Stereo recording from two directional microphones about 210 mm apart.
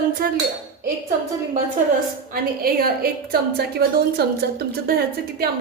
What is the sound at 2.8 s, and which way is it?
A woman's voice, 45° right (ahead or behind).